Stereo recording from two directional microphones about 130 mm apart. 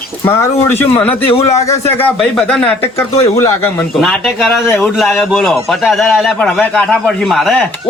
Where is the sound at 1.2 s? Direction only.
50° left (ahead or behind).